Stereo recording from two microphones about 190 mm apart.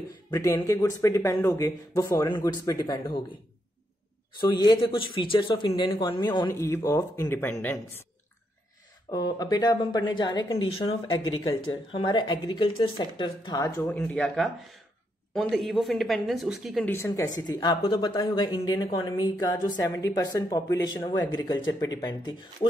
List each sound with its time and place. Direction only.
0.3 s speech: 15° left (ahead or behind)
4.4 s speech: 20° left (ahead or behind)
6.4 s speech: 15° left (ahead or behind)
9.1 s speech: 20° left (ahead or behind)
13.7 s speech: 10° left (ahead or behind)
16.9 s speech: 15° left (ahead or behind)